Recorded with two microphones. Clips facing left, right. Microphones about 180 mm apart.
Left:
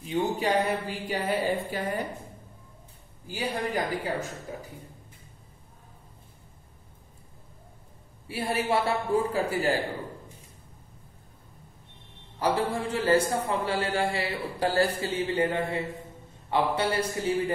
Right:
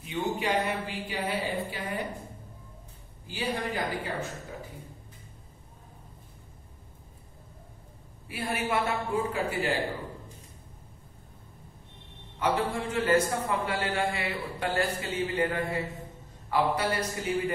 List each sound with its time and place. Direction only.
0.0 s a man's voice: 35° left (ahead or behind)
3.3 s a man's voice: 40° left (ahead or behind)
8.3 s a man's voice: 30° left (ahead or behind)
12.4 s a man's voice: 35° left (ahead or behind)